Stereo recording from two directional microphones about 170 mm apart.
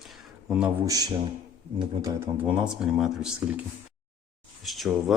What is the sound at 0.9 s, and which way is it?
Speech, 20° right (ahead or behind).